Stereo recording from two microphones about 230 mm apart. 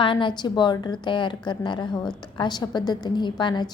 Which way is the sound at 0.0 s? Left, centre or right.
Left.